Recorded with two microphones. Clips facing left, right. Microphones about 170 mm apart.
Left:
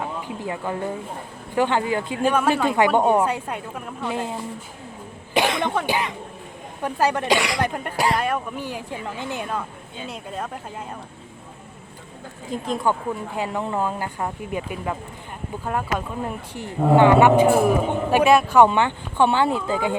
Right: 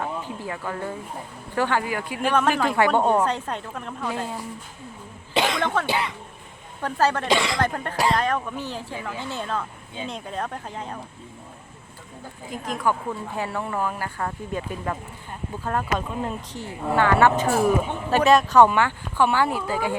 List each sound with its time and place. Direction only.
0.4 s a woman's voice: 20° left (ahead or behind)
4.0 s a woman's voice: 20° left (ahead or behind); by 10.8 s 5° left (ahead or behind)
12.5 s a woman's voice: 30° left (ahead or behind)